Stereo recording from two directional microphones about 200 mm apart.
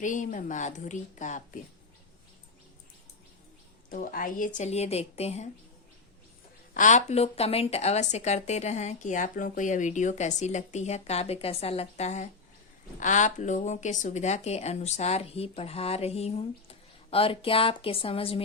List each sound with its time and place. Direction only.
0.0 s a woman's voice: 40° left (ahead or behind)
3.8 s a woman's voice: 45° left (ahead or behind)
6.7 s a woman's voice: 40° left (ahead or behind)